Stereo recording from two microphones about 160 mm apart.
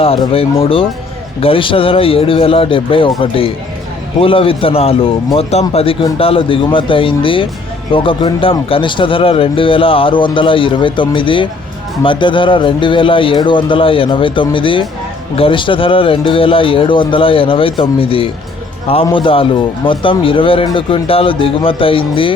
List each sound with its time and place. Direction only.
0.6 s speech: 35° left (ahead or behind)